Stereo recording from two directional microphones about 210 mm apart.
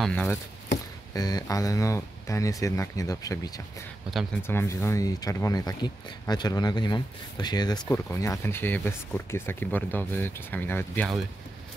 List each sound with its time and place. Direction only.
0.0 s speech: 5° left (ahead or behind)
1.1 s speech: 15° left (ahead or behind)